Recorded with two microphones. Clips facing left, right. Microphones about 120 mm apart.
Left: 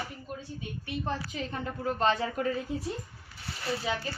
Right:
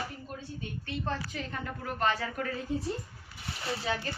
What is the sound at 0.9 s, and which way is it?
A woman's voice, 20° left (ahead or behind).